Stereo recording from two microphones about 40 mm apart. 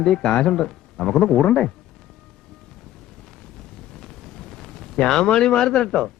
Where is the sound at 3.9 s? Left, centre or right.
Centre.